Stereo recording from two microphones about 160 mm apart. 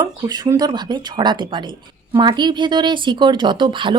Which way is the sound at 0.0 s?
25° right (ahead or behind).